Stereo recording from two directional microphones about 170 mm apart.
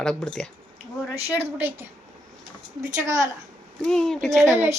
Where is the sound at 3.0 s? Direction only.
20° right (ahead or behind).